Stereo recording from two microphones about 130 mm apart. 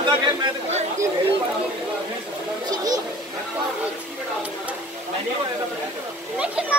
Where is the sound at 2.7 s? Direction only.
30° right (ahead or behind).